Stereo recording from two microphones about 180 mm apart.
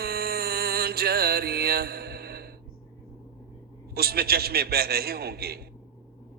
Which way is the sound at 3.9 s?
60° right (ahead or behind).